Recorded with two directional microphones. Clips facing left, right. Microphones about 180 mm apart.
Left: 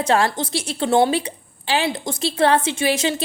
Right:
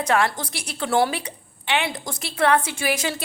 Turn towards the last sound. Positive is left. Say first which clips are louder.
# left 5 dB
turn(degrees=25)  # may be behind; listen again after turning